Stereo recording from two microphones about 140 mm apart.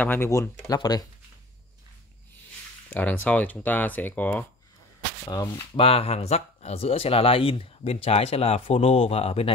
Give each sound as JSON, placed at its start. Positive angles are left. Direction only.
{"t": 0.0, "sound": "speech", "side_deg": 15}
{"t": 2.9, "sound": "speech", "side_deg": 10}
{"t": 5.3, "sound": "speech", "side_deg": 25}
{"t": 5.8, "sound": "speech", "side_deg": 45}